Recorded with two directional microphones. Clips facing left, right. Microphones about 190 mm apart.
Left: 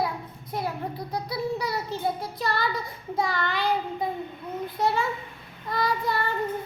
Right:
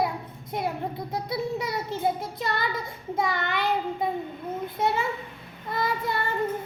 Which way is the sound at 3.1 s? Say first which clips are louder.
Even; 20° right (ahead or behind).